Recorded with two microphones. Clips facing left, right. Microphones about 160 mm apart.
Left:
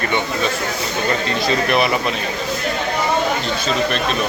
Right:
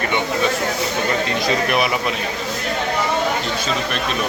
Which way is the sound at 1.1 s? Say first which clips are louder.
Left 3 dB; 15° right (ahead or behind).